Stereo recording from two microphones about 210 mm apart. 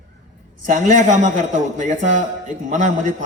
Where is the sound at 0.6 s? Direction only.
35° right (ahead or behind).